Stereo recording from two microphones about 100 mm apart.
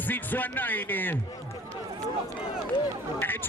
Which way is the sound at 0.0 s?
20° left (ahead or behind).